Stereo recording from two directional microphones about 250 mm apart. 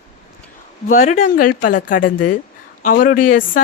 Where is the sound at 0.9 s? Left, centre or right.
Left.